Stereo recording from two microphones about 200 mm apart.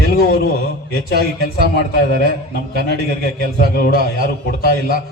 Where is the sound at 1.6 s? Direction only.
50° left (ahead or behind).